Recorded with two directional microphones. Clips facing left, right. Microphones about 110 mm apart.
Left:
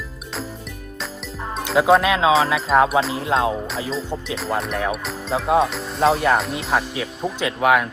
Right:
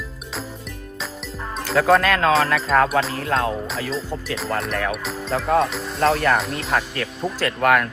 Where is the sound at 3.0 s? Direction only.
15° left (ahead or behind).